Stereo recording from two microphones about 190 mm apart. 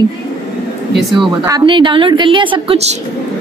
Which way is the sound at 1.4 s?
20° right (ahead or behind).